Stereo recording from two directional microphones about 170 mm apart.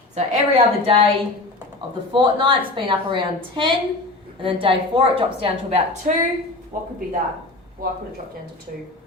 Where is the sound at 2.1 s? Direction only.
30° right (ahead or behind).